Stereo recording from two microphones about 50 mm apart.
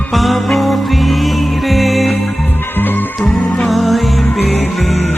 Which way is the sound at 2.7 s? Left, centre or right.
Left.